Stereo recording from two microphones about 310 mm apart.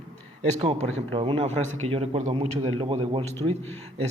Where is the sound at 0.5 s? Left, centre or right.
Right.